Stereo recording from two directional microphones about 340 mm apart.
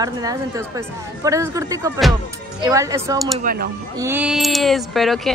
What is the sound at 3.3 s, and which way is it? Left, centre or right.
Speech, right.